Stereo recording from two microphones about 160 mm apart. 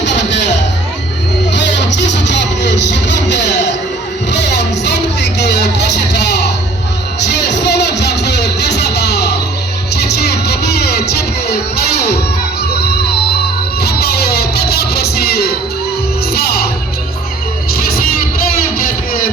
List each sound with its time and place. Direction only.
0.0 s music: 90° left
1.5 s music: 90° left
13.8 s music: 80° left
17.7 s music: 70° left (ahead or behind)